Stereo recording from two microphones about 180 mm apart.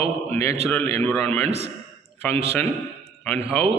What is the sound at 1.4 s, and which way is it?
Speech, 35° right (ahead or behind).